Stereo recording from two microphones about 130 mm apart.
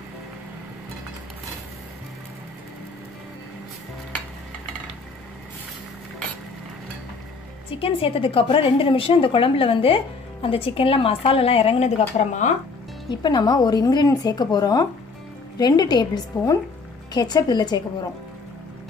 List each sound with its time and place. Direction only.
7.7 s a woman's voice: 45° left (ahead or behind)
12.2 s speech: 70° left (ahead or behind)
13.1 s a woman's voice: 35° left (ahead or behind)